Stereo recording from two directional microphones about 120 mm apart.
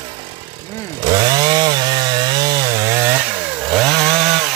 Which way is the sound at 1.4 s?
35° right (ahead or behind).